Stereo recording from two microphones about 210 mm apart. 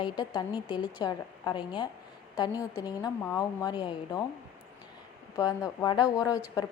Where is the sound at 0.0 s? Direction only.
20° left (ahead or behind).